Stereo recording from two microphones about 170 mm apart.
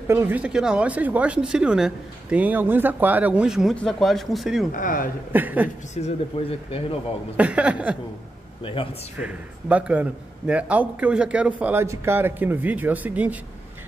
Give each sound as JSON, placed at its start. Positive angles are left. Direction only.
{"t": 0.1, "sound": "a man's voice", "side_deg": -10}
{"t": 4.7, "sound": "speech", "side_deg": 55}
{"t": 5.3, "sound": "a man's voice", "side_deg": -10}
{"t": 6.0, "sound": "speech", "side_deg": 40}
{"t": 7.3, "sound": "a man's voice", "side_deg": -5}
{"t": 9.2, "sound": "a man's voice", "side_deg": -10}